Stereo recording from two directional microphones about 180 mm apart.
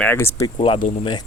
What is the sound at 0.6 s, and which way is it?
Speech, 30° left (ahead or behind).